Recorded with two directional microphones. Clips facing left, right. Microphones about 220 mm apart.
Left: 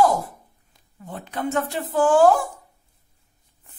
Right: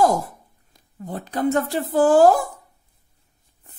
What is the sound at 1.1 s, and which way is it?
Speech, 40° right (ahead or behind).